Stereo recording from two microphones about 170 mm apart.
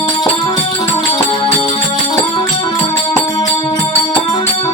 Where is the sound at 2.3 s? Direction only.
25° left (ahead or behind).